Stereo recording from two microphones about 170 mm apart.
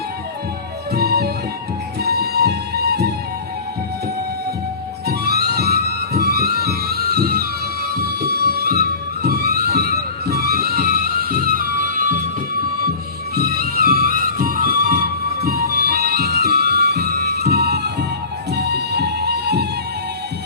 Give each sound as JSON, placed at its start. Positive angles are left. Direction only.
{"t": 0.9, "sound": "music", "side_deg": -65}
{"t": 5.0, "sound": "music", "side_deg": -70}
{"t": 13.3, "sound": "music", "side_deg": -65}